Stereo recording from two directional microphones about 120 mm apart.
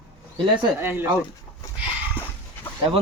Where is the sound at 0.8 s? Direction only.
20° right (ahead or behind).